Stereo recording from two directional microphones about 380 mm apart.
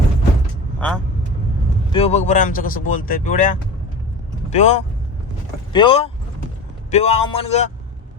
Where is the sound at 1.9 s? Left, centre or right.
Centre.